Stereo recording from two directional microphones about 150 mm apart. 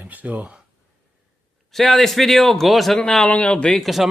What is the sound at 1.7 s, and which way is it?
A man's voice, centre (ahead or behind).